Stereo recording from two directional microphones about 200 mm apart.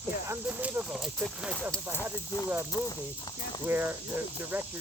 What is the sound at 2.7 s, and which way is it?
Speech, 20° left (ahead or behind).